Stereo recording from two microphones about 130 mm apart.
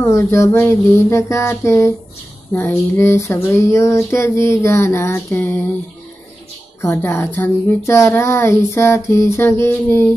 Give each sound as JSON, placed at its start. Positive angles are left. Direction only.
{"t": 0.0, "sound": "speech", "side_deg": 20}
{"t": 6.8, "sound": "speech", "side_deg": 20}